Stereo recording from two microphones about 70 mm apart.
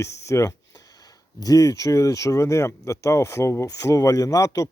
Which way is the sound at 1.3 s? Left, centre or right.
Left.